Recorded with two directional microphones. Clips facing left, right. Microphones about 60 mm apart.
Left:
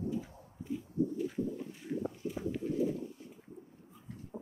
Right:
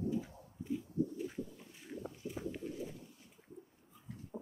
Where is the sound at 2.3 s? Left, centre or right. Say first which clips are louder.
Left 5 dB; centre.